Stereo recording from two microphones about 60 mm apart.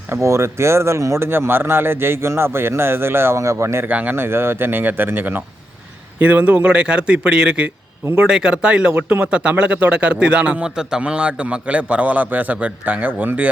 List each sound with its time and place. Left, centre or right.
0.1 s speech: right
1.3 s speech: right
3.4 s speech: right
3.8 s speech: right
4.1 s speech: right
6.1 s speech: right